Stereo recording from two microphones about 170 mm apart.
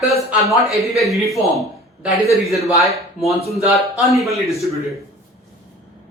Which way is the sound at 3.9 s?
Centre (ahead or behind).